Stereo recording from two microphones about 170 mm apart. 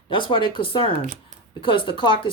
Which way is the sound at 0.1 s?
30° left (ahead or behind).